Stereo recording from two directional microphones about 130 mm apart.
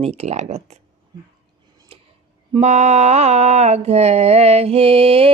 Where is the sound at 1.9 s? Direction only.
45° right (ahead or behind).